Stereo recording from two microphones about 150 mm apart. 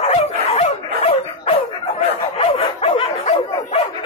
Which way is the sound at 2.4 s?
40° left (ahead or behind).